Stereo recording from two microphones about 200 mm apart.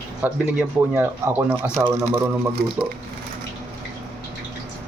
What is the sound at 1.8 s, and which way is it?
Speech, 30° right (ahead or behind).